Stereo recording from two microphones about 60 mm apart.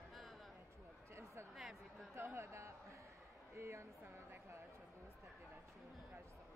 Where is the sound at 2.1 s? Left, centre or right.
Right.